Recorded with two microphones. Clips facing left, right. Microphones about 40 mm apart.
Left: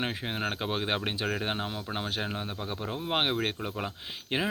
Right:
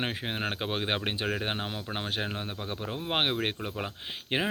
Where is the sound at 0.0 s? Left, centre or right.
Centre.